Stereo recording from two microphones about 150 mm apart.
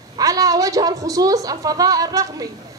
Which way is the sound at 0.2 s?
25° right (ahead or behind).